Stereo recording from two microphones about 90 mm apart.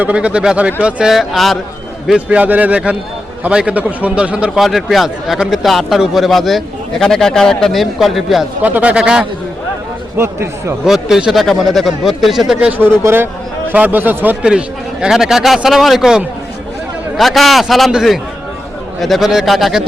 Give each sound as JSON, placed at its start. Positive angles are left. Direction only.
{"t": 0.0, "sound": "a man's voice", "side_deg": -15}
{"t": 2.0, "sound": "a man's voice", "side_deg": -15}
{"t": 4.6, "sound": "speech", "side_deg": 0}
{"t": 8.6, "sound": "a man's voice", "side_deg": -15}
{"t": 10.2, "sound": "speech", "side_deg": -30}
{"t": 10.8, "sound": "speech", "side_deg": -5}
{"t": 13.0, "sound": "speech", "side_deg": -25}
{"t": 15.0, "sound": "speech", "side_deg": -5}